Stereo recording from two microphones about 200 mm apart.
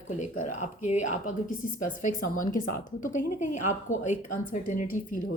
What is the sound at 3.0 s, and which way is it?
Speech, 40° left (ahead or behind).